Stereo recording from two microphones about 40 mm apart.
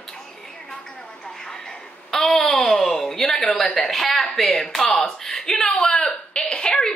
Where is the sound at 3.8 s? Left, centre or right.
Centre.